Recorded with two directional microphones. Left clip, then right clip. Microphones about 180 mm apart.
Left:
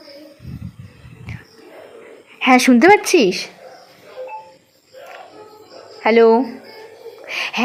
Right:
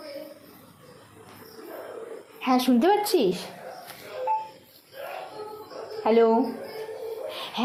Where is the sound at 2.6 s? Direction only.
45° left (ahead or behind).